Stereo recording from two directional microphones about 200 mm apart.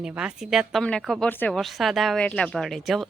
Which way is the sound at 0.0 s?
5° right (ahead or behind).